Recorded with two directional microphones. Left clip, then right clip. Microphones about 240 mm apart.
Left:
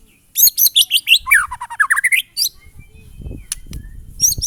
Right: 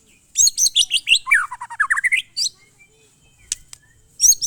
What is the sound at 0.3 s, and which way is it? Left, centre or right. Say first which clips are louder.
Bird: left 2 dB; centre.